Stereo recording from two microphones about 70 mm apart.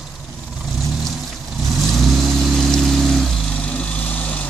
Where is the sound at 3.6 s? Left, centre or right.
Centre.